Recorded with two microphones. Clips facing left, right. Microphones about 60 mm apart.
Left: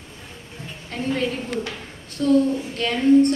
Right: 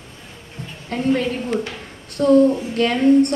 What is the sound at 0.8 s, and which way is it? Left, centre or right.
Speech, right.